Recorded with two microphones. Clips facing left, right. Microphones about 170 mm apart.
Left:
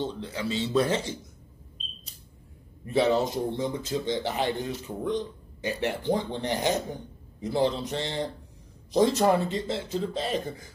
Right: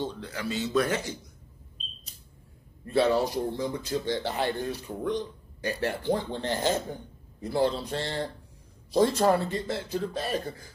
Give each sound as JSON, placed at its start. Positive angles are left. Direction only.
{"t": 0.0, "sound": "speech", "side_deg": 25}
{"t": 2.8, "sound": "speech", "side_deg": 20}